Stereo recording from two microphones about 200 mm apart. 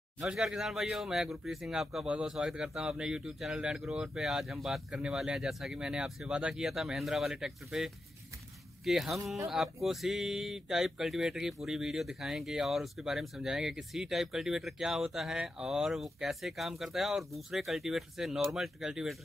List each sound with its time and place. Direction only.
0.2 s speech: 5° right (ahead or behind)